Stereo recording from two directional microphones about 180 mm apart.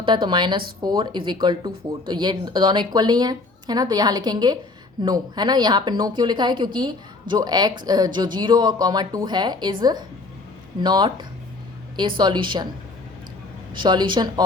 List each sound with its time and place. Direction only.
0.0 s speech: 25° right (ahead or behind)
13.7 s speech: 25° right (ahead or behind)